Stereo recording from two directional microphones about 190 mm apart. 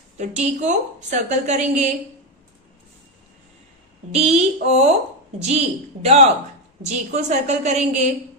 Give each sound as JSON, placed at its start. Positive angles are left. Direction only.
{"t": 0.2, "sound": "a woman's voice", "side_deg": -40}
{"t": 4.1, "sound": "a woman's voice", "side_deg": -35}